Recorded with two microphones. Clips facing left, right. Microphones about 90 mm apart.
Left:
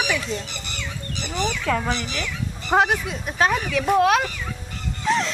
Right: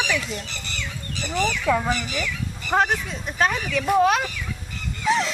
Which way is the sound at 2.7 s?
10° left (ahead or behind).